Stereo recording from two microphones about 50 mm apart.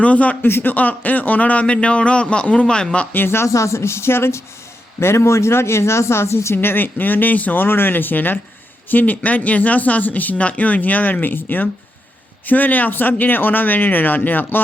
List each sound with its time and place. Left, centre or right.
0.0 s a man's voice: left
0.4 s a man's voice: left; by 3.1 s centre
3.1 s speech: left
3.5 s speech: left